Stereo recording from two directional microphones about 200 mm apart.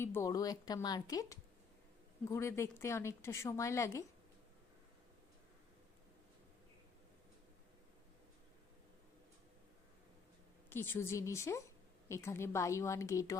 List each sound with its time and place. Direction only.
0.0 s a woman's voice: 15° left (ahead or behind)
10.7 s a woman's voice: 10° left (ahead or behind)